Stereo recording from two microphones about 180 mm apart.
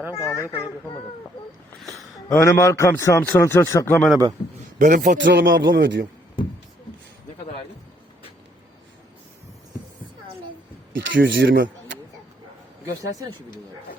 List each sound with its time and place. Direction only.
0.2 s a man's voice: 15° left (ahead or behind)
2.3 s a man's voice: 15° left (ahead or behind)
3.9 s speech: centre (ahead or behind)
4.8 s a man's voice: 50° right (ahead or behind)
5.1 s speech: 90° right; by 6.1 s 65° right (ahead or behind)
11.1 s speech: 90° right